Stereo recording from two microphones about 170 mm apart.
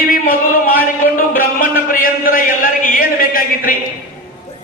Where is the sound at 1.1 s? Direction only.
55° left (ahead or behind).